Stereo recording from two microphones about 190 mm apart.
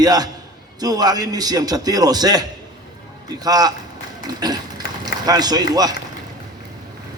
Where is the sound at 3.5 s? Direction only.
20° right (ahead or behind).